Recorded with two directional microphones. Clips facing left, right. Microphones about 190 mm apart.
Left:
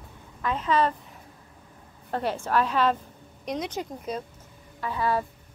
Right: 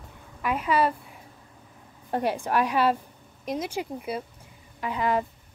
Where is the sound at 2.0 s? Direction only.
15° right (ahead or behind).